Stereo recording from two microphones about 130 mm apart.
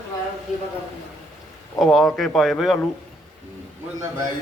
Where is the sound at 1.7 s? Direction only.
5° left (ahead or behind).